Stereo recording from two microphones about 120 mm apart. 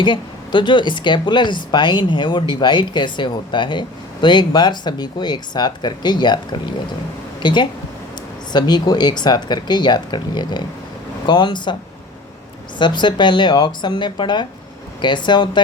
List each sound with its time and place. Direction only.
0.0 s speech: 40° left (ahead or behind)
12.8 s speech: 40° left (ahead or behind)